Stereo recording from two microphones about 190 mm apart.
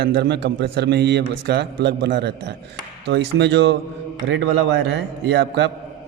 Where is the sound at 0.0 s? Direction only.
60° right (ahead or behind).